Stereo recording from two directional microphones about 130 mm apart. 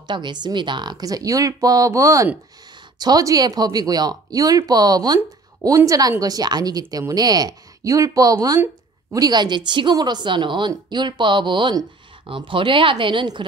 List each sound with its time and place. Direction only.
0.0 s a woman's voice: 35° right (ahead or behind)